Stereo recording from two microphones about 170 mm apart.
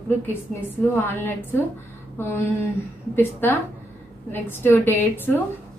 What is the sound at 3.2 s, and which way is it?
A woman's voice, 10° left (ahead or behind).